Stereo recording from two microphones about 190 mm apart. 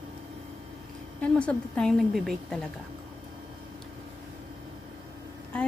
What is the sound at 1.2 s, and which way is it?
A woman's voice, 5° left (ahead or behind).